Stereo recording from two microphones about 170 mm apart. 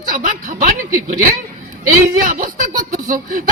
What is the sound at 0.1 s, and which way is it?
Speech, 50° right (ahead or behind).